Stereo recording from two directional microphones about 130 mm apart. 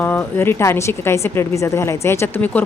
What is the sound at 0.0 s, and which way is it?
A woman's voice, 15° left (ahead or behind).